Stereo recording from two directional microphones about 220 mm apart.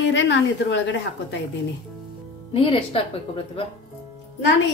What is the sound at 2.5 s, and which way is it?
Speech, 25° left (ahead or behind).